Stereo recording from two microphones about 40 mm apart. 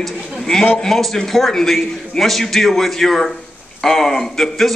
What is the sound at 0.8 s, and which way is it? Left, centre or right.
A man's voice, centre.